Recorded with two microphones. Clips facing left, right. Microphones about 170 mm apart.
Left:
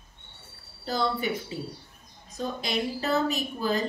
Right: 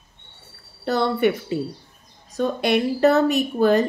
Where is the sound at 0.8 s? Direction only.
70° right (ahead or behind).